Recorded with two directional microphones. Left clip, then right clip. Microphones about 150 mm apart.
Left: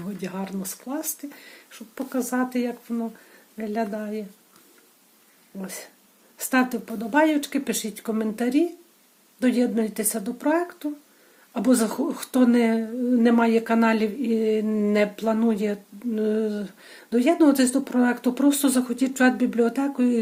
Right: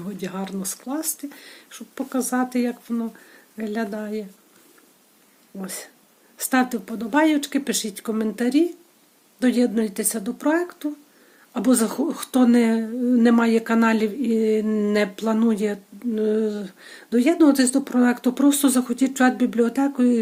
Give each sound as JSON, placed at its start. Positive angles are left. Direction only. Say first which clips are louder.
{"t": 0.0, "sound": "speech", "louder": "right 2 dB", "side_deg": -25}
{"t": 5.5, "sound": "speech", "louder": "right 2 dB", "side_deg": -30}